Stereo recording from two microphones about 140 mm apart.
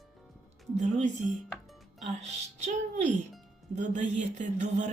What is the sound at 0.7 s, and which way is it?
Speech, 60° right (ahead or behind).